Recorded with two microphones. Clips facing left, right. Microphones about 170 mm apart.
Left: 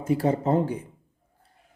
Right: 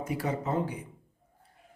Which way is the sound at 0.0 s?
30° left (ahead or behind).